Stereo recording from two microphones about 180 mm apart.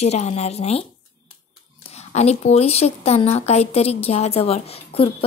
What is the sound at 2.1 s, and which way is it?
A woman's voice, 40° left (ahead or behind).